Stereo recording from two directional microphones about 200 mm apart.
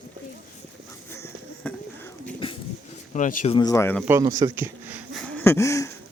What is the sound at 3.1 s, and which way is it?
Speech, 35° left (ahead or behind).